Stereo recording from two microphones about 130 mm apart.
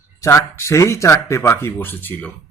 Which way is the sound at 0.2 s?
25° left (ahead or behind).